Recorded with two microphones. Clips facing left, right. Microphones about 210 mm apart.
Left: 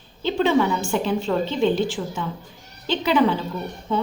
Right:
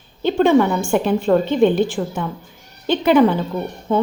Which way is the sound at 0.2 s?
50° right (ahead or behind).